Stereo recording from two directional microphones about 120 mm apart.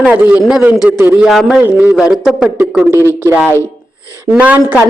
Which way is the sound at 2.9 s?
20° right (ahead or behind).